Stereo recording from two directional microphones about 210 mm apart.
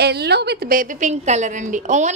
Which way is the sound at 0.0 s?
50° right (ahead or behind).